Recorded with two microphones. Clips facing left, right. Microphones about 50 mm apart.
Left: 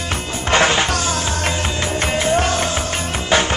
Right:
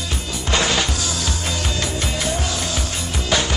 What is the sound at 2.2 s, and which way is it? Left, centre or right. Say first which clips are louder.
Music: left 9 dB; left.